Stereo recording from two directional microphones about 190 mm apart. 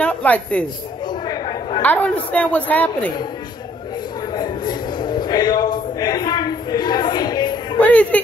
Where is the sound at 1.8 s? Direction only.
10° left (ahead or behind).